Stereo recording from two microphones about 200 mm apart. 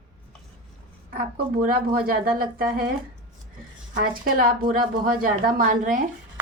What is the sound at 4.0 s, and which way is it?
A woman's voice, 45° right (ahead or behind).